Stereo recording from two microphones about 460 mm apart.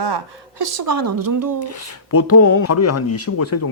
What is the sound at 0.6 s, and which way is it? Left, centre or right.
Speech, right.